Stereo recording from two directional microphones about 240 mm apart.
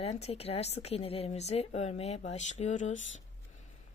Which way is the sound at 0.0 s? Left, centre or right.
Left.